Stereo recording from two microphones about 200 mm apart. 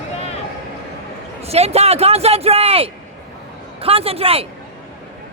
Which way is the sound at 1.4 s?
30° right (ahead or behind).